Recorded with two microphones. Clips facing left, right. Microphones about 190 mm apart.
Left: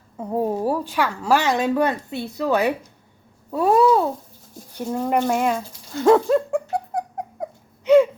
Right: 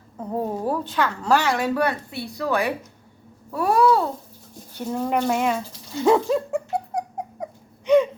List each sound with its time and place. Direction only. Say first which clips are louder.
0.2 s a woman's voice: left 4 dB; 10° left (ahead or behind)
3.5 s babbling: left 2 dB; 20° left (ahead or behind)
4.9 s a sound: left 2 dB; 5° left (ahead or behind)